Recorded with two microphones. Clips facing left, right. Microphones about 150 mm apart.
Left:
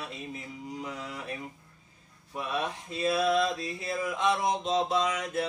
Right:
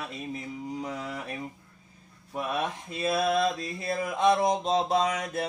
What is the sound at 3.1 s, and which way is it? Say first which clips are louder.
Mantra: right 1 dB; 40° right (ahead or behind).